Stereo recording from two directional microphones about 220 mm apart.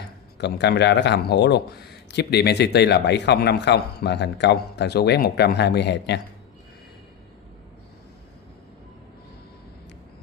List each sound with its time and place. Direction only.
0.4 s a man's voice: 50° left (ahead or behind)